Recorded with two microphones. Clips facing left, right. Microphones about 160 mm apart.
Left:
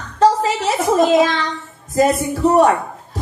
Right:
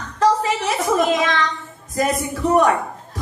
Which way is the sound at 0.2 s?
30° left (ahead or behind).